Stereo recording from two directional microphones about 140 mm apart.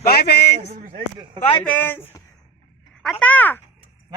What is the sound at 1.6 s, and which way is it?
Speech, 10° left (ahead or behind).